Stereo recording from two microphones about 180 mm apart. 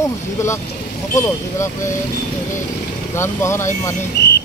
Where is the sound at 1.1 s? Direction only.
15° left (ahead or behind).